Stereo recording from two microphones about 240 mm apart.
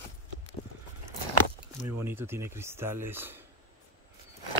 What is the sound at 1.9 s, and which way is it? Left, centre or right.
Speech, centre.